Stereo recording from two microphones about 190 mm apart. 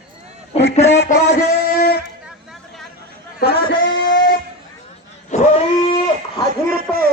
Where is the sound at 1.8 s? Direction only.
50° left (ahead or behind).